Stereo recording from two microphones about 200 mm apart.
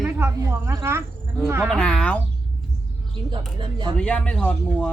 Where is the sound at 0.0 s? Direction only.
10° right (ahead or behind).